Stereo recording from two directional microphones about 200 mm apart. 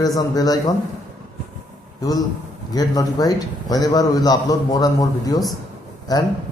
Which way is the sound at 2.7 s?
20° left (ahead or behind).